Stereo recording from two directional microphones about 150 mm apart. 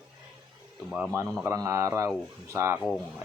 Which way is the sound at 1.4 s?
20° right (ahead or behind).